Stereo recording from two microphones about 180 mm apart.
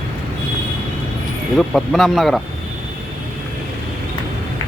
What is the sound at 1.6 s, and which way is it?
Speech, centre (ahead or behind).